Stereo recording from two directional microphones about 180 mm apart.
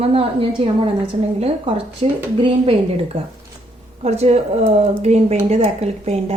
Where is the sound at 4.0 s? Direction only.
35° right (ahead or behind).